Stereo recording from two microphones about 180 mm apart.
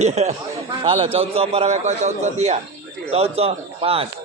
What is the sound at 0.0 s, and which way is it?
A man's voice, 35° right (ahead or behind).